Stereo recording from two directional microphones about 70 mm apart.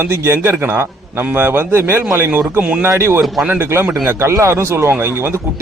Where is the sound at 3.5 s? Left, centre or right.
Right.